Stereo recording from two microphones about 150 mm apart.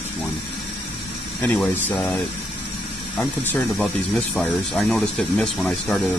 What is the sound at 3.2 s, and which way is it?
Speech, 10° left (ahead or behind).